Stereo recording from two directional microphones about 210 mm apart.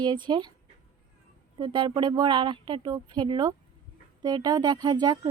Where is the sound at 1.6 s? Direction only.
20° right (ahead or behind).